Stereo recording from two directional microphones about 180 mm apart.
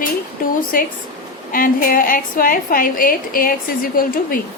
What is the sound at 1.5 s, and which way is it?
A woman's voice, 50° left (ahead or behind).